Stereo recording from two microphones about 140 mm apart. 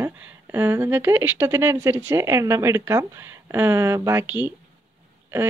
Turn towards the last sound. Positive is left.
turn(degrees=-15)  # may be behind; listen again after turning